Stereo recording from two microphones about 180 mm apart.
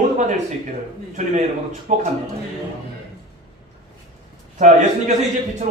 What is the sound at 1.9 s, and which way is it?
Speech, 40° right (ahead or behind).